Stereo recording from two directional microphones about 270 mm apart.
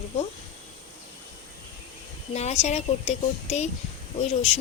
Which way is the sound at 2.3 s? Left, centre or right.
Left.